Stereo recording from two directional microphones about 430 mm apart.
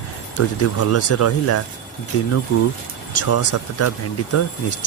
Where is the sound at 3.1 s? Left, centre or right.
Left.